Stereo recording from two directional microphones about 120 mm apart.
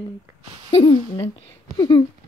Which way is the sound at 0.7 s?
55° left (ahead or behind).